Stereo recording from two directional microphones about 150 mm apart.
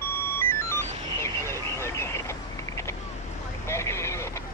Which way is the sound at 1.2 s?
20° left (ahead or behind).